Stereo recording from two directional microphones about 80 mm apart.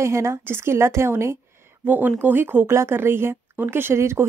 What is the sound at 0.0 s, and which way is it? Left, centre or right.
Speech, right.